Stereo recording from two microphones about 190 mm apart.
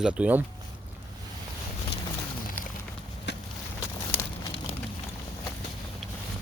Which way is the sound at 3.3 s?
65° left (ahead or behind).